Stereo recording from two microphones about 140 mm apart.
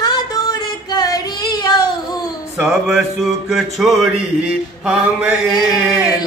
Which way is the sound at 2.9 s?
Centre (ahead or behind).